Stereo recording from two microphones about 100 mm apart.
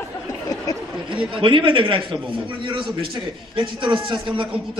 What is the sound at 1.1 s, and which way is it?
Speech, 55° right (ahead or behind).